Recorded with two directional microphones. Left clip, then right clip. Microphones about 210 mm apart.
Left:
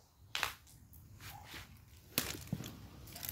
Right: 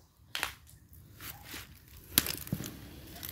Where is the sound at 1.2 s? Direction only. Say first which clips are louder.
Right 5 dB; 50° right (ahead or behind).